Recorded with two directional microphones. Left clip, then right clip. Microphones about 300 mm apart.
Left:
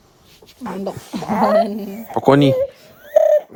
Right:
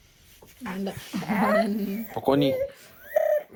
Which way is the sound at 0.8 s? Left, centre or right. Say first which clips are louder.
Left 7 dB; centre.